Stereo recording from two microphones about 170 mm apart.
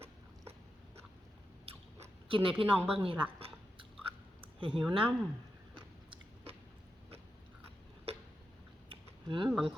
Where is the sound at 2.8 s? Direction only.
35° right (ahead or behind).